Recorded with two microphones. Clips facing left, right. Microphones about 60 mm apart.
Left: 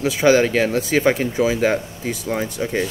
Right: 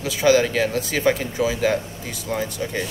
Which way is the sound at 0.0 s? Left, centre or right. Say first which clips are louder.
Left 2 dB; left.